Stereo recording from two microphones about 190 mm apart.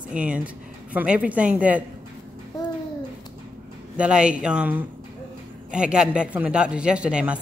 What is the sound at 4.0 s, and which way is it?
A woman's voice, 5° right (ahead or behind).